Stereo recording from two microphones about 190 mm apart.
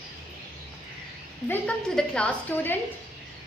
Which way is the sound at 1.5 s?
5° left (ahead or behind).